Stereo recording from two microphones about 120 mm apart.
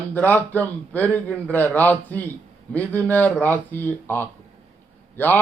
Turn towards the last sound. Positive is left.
turn(degrees=15)  # may be behind; listen again after turning